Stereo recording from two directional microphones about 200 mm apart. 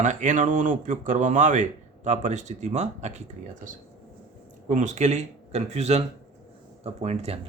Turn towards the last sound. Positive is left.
turn(degrees=-30)  # may be behind; listen again after turning